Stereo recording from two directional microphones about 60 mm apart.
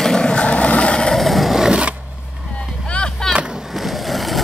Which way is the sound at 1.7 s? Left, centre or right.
Centre.